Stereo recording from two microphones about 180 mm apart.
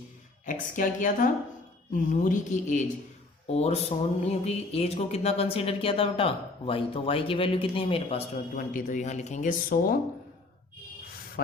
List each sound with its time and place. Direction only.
0.4 s speech: 45° left (ahead or behind)
3.5 s a sound: 35° left (ahead or behind)
8.5 s speech: 45° left (ahead or behind)